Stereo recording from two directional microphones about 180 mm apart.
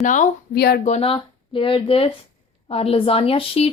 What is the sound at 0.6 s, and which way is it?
Speech, 60° left (ahead or behind).